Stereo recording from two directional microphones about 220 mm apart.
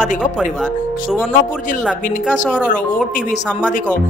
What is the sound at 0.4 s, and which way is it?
Speech, centre (ahead or behind).